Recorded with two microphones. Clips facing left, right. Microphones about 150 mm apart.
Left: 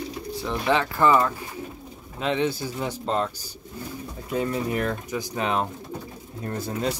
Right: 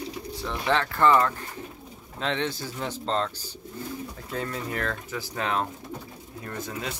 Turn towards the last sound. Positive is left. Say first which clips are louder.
# left 6 dB
turn(degrees=35)  # may be behind; listen again after turning